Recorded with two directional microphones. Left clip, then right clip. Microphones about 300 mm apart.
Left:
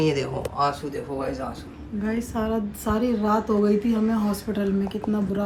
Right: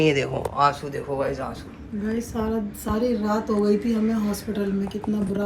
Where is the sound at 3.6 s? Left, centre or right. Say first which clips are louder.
Even; centre.